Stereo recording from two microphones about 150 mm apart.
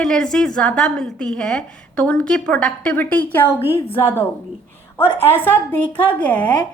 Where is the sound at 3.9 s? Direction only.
15° left (ahead or behind).